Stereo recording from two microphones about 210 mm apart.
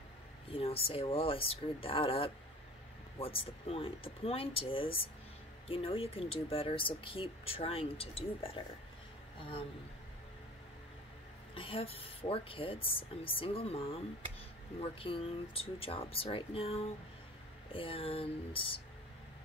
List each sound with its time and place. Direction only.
0.5 s speech: 25° left (ahead or behind)
11.5 s speech: 25° left (ahead or behind)